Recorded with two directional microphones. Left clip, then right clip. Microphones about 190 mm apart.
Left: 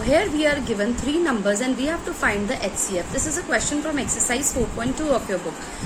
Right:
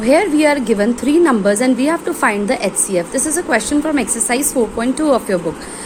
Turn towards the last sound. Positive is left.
turn(degrees=-45)  # may be behind; listen again after turning